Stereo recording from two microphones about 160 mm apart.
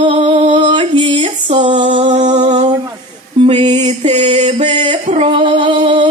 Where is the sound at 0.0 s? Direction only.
35° right (ahead or behind).